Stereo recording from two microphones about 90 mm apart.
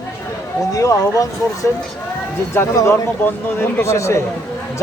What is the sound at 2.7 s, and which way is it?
A man's voice, 25° left (ahead or behind).